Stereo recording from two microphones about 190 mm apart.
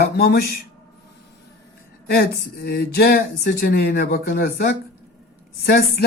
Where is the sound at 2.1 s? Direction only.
55° left (ahead or behind).